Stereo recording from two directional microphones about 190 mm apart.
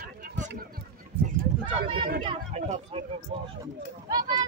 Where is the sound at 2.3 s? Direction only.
30° right (ahead or behind).